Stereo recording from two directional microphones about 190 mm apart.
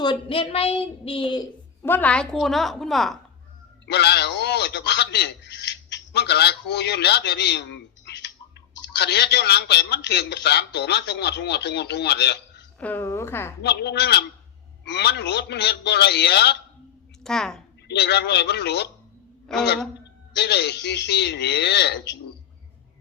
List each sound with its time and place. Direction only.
0.0 s a woman's voice: 25° left (ahead or behind)
1.8 s a woman's voice: 10° left (ahead or behind)
3.8 s speech: 60° left (ahead or behind)
8.0 s clicking: 65° left (ahead or behind)
8.8 s speech: 60° left (ahead or behind)
12.8 s a woman's voice: 10° left (ahead or behind)
13.6 s speech: 60° left (ahead or behind)
17.2 s a woman's voice: 5° left (ahead or behind)
17.8 s speech: 60° left (ahead or behind)
20.3 s speech: 60° left (ahead or behind)